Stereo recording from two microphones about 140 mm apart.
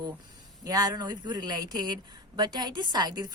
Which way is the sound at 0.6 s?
25° right (ahead or behind).